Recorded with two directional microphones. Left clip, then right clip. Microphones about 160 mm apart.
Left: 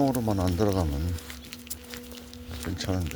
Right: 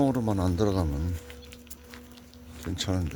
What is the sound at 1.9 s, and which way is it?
Music, 65° left (ahead or behind).